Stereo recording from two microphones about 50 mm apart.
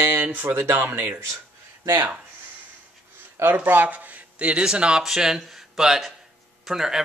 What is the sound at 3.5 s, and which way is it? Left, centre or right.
Speech, right.